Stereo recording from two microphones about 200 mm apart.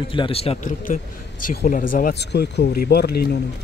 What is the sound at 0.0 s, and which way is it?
A man's voice, 25° left (ahead or behind).